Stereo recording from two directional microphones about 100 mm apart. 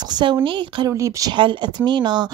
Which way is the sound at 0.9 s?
30° right (ahead or behind).